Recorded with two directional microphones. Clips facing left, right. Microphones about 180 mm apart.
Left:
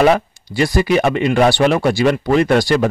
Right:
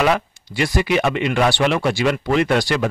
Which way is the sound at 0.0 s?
35° left (ahead or behind).